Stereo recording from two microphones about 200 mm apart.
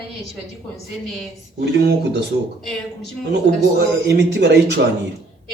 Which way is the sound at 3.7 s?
55° right (ahead or behind).